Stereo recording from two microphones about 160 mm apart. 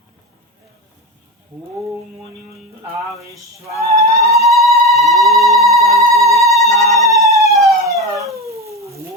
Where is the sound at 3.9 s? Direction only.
20° right (ahead or behind).